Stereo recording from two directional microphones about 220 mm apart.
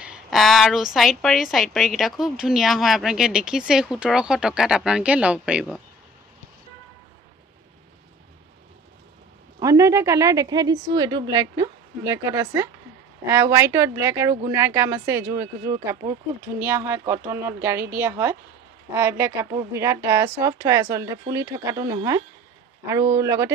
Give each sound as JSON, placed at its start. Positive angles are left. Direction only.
{"t": 0.0, "sound": "a woman's voice", "side_deg": -5}
{"t": 9.6, "sound": "a woman's voice", "side_deg": -15}